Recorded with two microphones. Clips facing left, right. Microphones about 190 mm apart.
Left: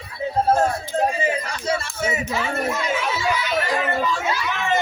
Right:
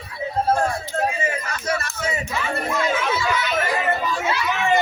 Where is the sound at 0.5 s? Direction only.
20° left (ahead or behind).